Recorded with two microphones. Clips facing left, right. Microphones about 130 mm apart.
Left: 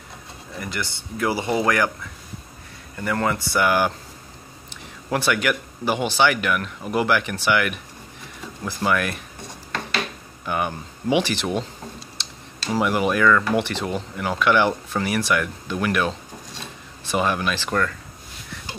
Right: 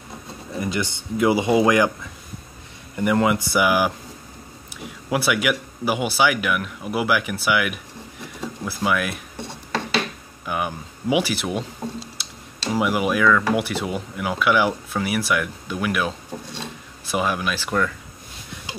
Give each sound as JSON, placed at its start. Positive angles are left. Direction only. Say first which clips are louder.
{"t": 0.6, "sound": "speech", "louder": "right 5 dB", "side_deg": -20}
{"t": 3.0, "sound": "speech", "louder": "right 4 dB", "side_deg": -15}
{"t": 10.4, "sound": "speech", "louder": "left 1 dB", "side_deg": -5}
{"t": 12.2, "sound": "tick-tock", "louder": "left 1 dB", "side_deg": -10}
{"t": 12.7, "sound": "speech", "louder": "even", "side_deg": -5}